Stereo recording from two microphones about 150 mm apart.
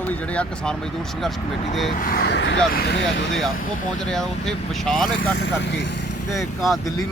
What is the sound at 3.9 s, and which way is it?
Speech, 5° left (ahead or behind).